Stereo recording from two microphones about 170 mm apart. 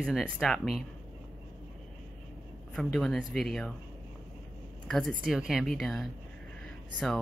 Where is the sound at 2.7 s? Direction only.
5° left (ahead or behind).